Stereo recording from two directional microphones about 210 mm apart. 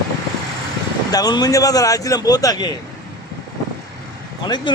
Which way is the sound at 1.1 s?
20° left (ahead or behind).